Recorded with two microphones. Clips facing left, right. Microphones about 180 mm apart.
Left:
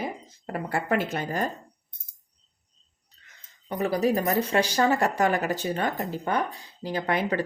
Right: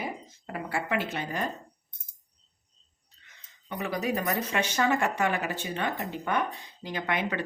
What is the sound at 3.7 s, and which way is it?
Speech, 35° left (ahead or behind).